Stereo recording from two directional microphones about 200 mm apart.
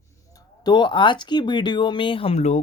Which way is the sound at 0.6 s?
20° left (ahead or behind).